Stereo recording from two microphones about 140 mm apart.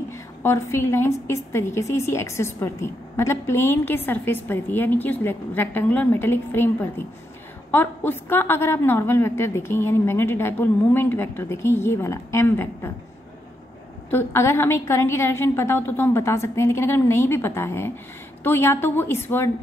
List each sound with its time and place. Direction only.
0.4 s a woman's voice: 20° left (ahead or behind)
14.1 s a woman's voice: 20° left (ahead or behind)